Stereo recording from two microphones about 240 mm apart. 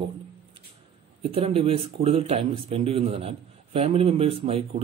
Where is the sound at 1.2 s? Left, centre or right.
Right.